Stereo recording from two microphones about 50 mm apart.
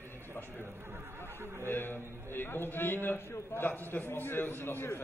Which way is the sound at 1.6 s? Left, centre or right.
Left.